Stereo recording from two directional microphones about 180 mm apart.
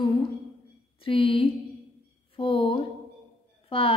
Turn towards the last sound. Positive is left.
turn(degrees=30)  # may be behind; listen again after turning